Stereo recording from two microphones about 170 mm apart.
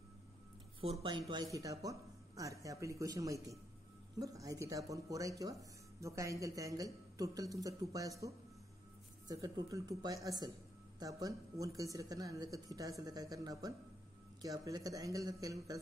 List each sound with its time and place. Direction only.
1.0 s speech: 30° right (ahead or behind)
9.3 s speech: 20° right (ahead or behind)